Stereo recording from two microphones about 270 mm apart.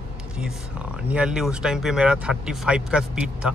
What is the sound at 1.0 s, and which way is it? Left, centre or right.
Speech, centre.